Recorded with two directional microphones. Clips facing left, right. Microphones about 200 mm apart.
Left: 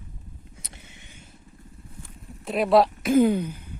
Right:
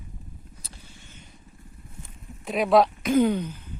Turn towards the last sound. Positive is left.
turn(degrees=10)  # may be behind; listen again after turning